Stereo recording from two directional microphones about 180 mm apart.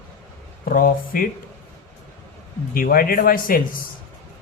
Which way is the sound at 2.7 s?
55° left (ahead or behind).